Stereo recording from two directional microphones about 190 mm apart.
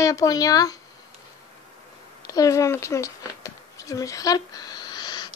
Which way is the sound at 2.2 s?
20° left (ahead or behind).